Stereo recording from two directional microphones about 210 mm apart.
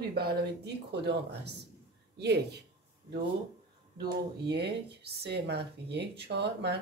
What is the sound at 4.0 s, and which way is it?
A woman's voice, 50° right (ahead or behind).